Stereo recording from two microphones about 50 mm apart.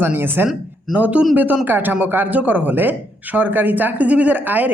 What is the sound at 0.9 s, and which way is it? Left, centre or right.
Speech, right.